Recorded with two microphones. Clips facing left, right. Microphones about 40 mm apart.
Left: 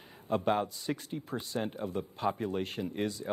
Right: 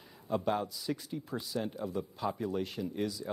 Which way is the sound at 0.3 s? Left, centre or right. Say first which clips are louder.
Left 2 dB; left.